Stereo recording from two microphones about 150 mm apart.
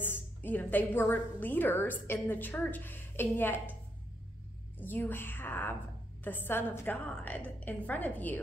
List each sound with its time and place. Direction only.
0.0 s a woman's voice: 15° left (ahead or behind)
4.7 s a woman's voice: 10° left (ahead or behind)